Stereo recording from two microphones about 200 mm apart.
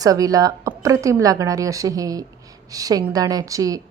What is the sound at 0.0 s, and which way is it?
A woman's voice, 20° right (ahead or behind).